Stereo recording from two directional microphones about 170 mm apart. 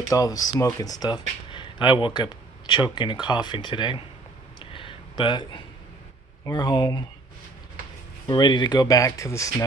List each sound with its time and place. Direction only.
0.1 s speech: 20° left (ahead or behind)
4.6 s a sound: 30° left (ahead or behind)
6.4 s speech: 25° left (ahead or behind)
8.3 s speech: 25° left (ahead or behind)